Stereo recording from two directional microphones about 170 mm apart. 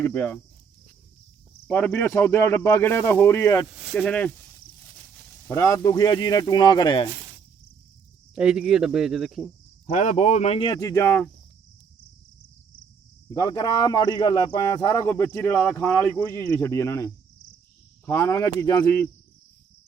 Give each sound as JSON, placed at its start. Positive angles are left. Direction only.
{"t": 0.0, "sound": "speech", "side_deg": 10}
{"t": 1.6, "sound": "speech", "side_deg": 10}
{"t": 3.9, "sound": "speech", "side_deg": 5}
{"t": 5.5, "sound": "speech", "side_deg": 20}
{"t": 8.4, "sound": "speech", "side_deg": -5}
{"t": 9.8, "sound": "speech", "side_deg": 40}
{"t": 13.3, "sound": "speech", "side_deg": 20}